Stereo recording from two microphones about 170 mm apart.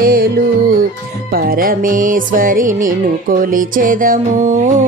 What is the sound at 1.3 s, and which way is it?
Music, 60° right (ahead or behind).